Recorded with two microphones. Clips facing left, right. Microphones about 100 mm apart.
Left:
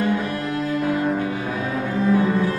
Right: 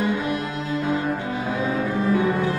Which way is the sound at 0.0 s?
20° right (ahead or behind).